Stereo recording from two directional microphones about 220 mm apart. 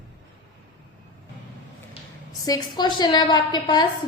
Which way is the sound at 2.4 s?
20° left (ahead or behind).